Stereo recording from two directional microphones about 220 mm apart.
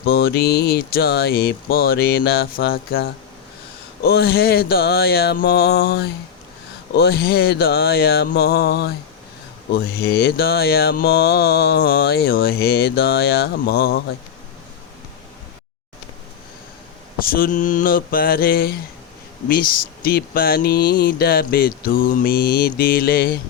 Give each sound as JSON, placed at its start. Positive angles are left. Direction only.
{"t": 0.0, "sound": "mantra", "side_deg": 45}
{"t": 17.2, "sound": "speech", "side_deg": 40}